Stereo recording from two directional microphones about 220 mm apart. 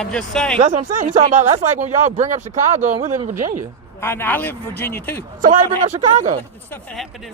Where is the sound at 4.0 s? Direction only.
10° left (ahead or behind).